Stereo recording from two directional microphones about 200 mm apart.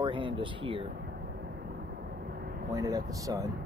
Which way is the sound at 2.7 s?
15° right (ahead or behind).